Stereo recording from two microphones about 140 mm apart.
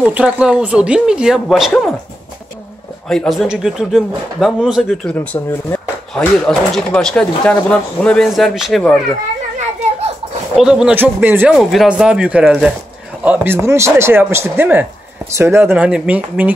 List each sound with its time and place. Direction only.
0.0 s speech: 5° right (ahead or behind)
3.1 s speech: centre (ahead or behind)
5.0 s speech: 10° left (ahead or behind)
10.5 s speech: 5° right (ahead or behind)
11.5 s speech: centre (ahead or behind)